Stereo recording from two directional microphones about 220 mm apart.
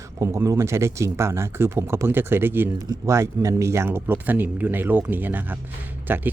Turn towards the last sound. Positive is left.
turn(degrees=-10)  # may be behind; listen again after turning